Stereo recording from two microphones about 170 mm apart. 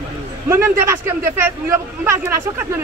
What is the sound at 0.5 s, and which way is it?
Speech, 15° right (ahead or behind).